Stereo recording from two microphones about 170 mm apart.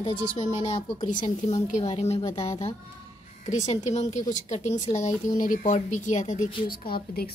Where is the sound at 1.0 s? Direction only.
50° left (ahead or behind).